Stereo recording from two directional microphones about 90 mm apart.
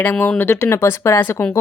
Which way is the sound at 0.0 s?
15° left (ahead or behind).